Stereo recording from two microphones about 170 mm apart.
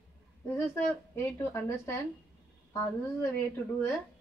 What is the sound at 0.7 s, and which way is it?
A woman's voice, 15° left (ahead or behind).